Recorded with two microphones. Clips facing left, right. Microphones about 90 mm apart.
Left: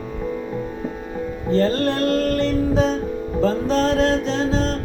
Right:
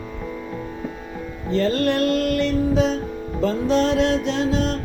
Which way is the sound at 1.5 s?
35° left (ahead or behind).